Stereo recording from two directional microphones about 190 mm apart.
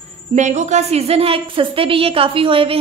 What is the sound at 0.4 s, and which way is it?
A woman's voice, 40° right (ahead or behind).